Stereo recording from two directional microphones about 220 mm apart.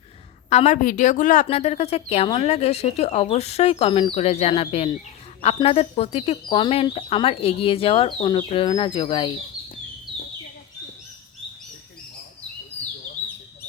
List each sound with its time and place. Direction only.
0.5 s speech: 30° left (ahead or behind)